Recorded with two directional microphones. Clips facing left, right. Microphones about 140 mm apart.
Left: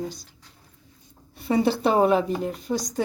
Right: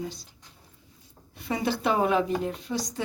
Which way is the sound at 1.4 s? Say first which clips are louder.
Left 5 dB; 30° left (ahead or behind).